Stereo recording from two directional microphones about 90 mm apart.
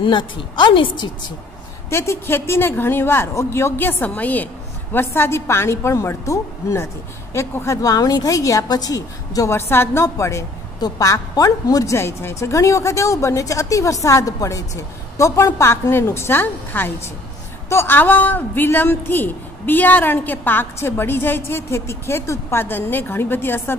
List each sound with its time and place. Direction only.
0.0 s a woman's voice: 60° left (ahead or behind)
1.9 s a woman's voice: 30° left (ahead or behind)
9.6 s a woman's voice: 25° left (ahead or behind)